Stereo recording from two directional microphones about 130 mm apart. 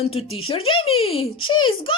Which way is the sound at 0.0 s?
50° left (ahead or behind).